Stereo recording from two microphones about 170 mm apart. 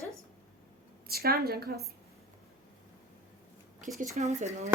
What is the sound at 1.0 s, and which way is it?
Speech, 65° right (ahead or behind).